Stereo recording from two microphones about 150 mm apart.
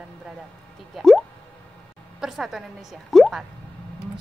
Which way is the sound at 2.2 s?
Centre (ahead or behind).